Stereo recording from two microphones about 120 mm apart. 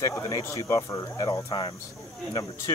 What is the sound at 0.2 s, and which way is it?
Speech, 25° left (ahead or behind).